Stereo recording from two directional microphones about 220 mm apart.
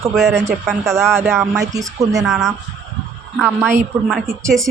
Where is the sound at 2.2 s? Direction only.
Centre (ahead or behind).